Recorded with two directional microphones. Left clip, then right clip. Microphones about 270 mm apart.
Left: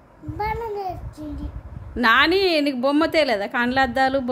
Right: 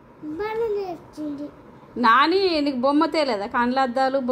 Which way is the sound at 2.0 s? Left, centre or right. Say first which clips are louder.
Even; centre.